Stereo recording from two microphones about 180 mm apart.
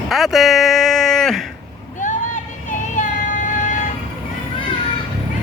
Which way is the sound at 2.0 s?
45° left (ahead or behind).